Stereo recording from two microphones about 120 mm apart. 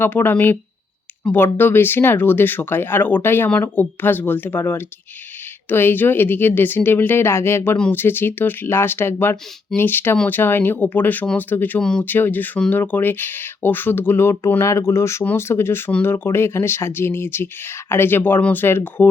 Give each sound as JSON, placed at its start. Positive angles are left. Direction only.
{"t": 0.0, "sound": "speech", "side_deg": 15}